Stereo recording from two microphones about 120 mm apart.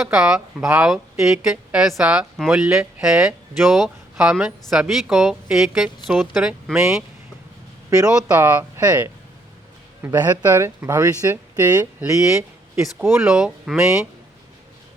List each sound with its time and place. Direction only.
0.0 s speech: 5° right (ahead or behind)
7.9 s a man's voice: 30° right (ahead or behind)
8.4 s speech: 20° right (ahead or behind)
10.0 s speech: 15° right (ahead or behind)